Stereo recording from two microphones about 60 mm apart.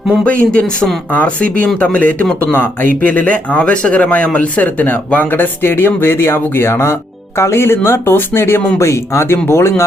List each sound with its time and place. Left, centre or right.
0.3 s speech: left